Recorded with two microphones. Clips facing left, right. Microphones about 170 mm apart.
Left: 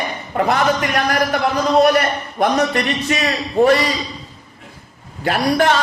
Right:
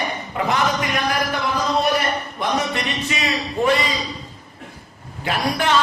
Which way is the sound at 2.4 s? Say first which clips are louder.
Left 8 dB; 45° left (ahead or behind).